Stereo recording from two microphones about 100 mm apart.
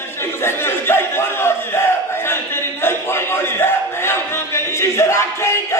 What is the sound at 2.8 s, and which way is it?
Music, 25° left (ahead or behind).